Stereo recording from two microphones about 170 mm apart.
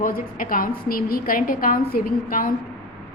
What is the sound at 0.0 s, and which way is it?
A woman's voice, 55° left (ahead or behind).